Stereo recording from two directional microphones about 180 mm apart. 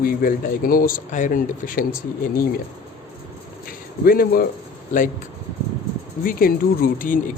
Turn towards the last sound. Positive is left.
turn(degrees=50)  # may be behind; listen again after turning